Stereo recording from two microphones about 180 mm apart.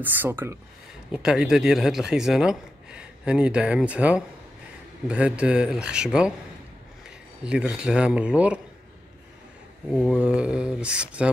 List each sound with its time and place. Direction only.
0.0 s speech: 10° right (ahead or behind)
7.4 s speech: 5° right (ahead or behind)
9.8 s speech: centre (ahead or behind)